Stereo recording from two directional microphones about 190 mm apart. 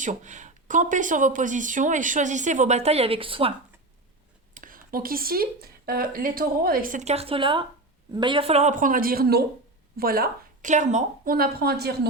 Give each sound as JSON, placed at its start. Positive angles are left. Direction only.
{"t": 0.0, "sound": "speech", "side_deg": -40}
{"t": 4.5, "sound": "speech", "side_deg": -45}